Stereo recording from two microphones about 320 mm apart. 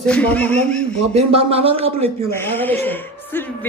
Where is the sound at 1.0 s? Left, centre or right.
Centre.